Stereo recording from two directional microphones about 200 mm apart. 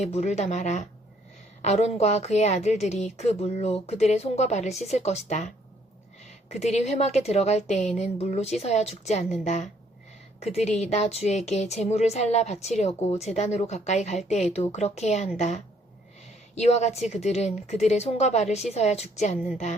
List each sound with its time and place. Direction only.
0.0 s speech: 35° left (ahead or behind)
6.5 s speech: 35° left (ahead or behind)
16.6 s speech: 35° left (ahead or behind)